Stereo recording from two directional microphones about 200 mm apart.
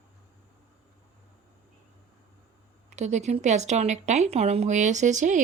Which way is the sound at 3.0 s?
35° right (ahead or behind).